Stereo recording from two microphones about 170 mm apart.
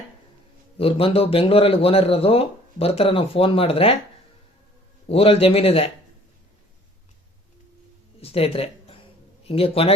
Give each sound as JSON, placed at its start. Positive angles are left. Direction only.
{"t": 0.8, "sound": "speech", "side_deg": 35}
{"t": 5.0, "sound": "speech", "side_deg": 35}
{"t": 8.2, "sound": "a sound", "side_deg": 35}
{"t": 9.4, "sound": "speech", "side_deg": 35}